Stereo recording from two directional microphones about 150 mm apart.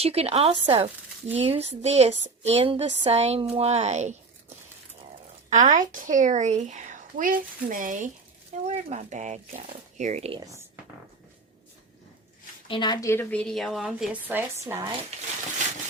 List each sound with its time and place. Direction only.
0.0 s a woman's voice: 45° right (ahead or behind)
12.6 s a woman's voice: 30° left (ahead or behind); by 14.2 s 5° right (ahead or behind)
14.3 s speech: 15° right (ahead or behind)